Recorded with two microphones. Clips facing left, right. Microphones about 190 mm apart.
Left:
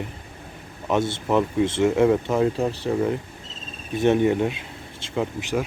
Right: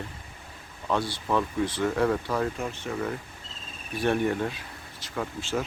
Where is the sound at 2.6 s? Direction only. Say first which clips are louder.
Left 8 dB; 35° left (ahead or behind).